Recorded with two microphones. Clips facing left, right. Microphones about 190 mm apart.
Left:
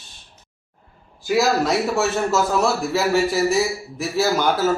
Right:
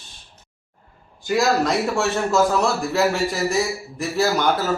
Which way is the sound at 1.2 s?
5° left (ahead or behind).